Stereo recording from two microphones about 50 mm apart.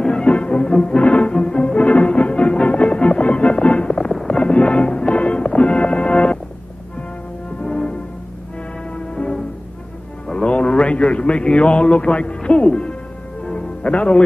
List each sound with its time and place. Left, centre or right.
0.0 s music: centre
7.6 s music: centre
8.9 s music: centre
10.2 s a sound: centre
13.5 s music: left